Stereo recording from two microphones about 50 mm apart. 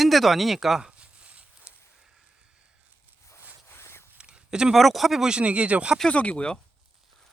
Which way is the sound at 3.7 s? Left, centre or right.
Left.